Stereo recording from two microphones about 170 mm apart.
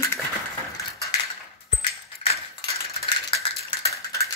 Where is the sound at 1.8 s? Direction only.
30° left (ahead or behind).